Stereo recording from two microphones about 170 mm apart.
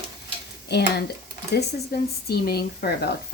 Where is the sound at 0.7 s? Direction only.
80° left.